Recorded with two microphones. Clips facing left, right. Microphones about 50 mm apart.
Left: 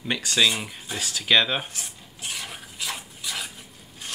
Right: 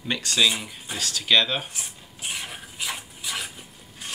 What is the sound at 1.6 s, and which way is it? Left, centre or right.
Speech, centre.